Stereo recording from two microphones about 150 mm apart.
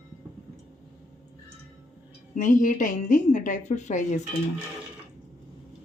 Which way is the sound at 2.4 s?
60° left (ahead or behind).